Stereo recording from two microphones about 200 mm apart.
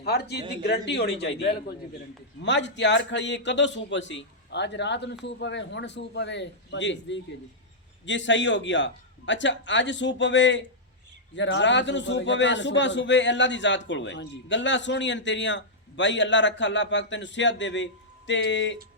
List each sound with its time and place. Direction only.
0.0 s a man's voice: 55° left (ahead or behind)
2.4 s a man's voice: 60° left (ahead or behind)